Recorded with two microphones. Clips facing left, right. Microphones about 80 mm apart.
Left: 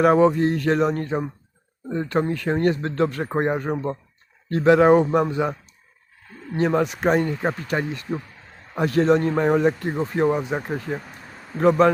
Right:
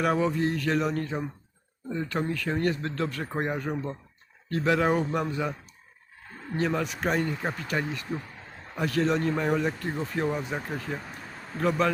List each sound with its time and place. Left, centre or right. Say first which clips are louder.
0.0 s speech: left 9 dB; left
6.6 s speech: left 7 dB; left